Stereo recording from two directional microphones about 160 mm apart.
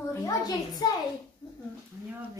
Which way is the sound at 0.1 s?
20° left (ahead or behind).